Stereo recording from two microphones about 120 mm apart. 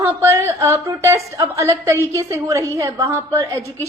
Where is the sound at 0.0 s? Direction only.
25° right (ahead or behind).